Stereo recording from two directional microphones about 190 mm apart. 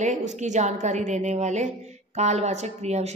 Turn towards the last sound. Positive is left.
turn(degrees=-35)  # may be behind; listen again after turning